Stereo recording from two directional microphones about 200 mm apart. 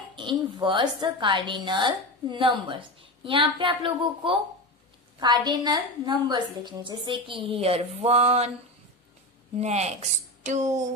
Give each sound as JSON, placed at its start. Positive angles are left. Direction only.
{"t": 0.1, "sound": "a woman's voice", "side_deg": -25}
{"t": 9.6, "sound": "speech", "side_deg": -35}